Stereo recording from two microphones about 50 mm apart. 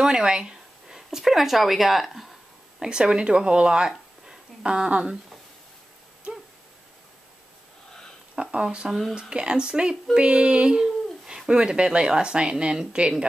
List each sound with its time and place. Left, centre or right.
0.0 s speech: centre
2.8 s speech: centre
8.4 s speech: right